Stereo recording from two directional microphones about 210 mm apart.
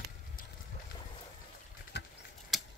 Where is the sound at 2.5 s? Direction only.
Centre (ahead or behind).